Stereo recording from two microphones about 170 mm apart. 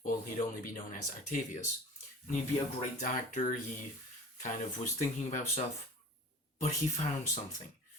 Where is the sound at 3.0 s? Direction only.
50° left (ahead or behind).